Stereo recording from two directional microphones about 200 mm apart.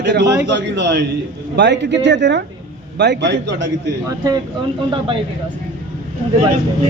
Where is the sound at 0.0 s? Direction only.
60° right (ahead or behind).